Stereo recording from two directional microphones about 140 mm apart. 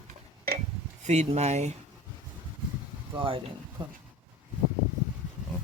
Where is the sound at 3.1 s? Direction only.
40° right (ahead or behind).